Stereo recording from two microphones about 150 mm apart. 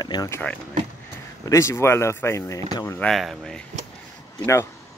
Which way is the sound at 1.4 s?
20° left (ahead or behind).